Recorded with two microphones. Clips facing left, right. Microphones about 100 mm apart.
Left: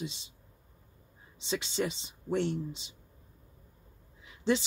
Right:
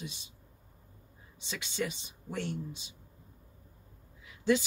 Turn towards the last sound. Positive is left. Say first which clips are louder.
# right 1 dB
turn(degrees=25)  # may be behind; listen again after turning